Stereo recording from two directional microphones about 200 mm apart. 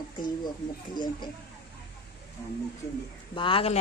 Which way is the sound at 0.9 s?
20° left (ahead or behind).